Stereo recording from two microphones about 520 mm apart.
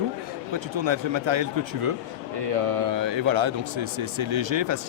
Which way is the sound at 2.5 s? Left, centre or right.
Right.